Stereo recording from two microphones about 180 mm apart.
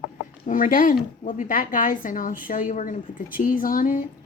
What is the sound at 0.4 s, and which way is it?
A woman's voice, 45° left (ahead or behind).